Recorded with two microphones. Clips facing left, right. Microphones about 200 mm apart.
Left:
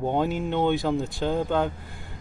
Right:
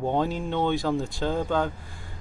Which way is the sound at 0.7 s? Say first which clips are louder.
Left 1 dB; centre (ahead or behind).